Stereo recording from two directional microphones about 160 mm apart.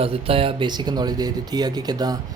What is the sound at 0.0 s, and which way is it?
Speech, 35° right (ahead or behind).